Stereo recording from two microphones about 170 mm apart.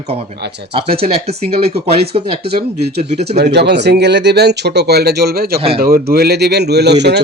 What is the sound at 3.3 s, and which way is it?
Speech, 75° right (ahead or behind).